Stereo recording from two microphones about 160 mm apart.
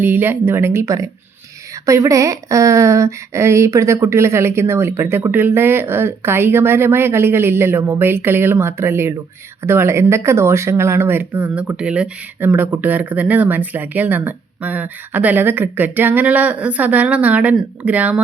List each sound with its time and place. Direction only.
0.0 s speech: 10° right (ahead or behind)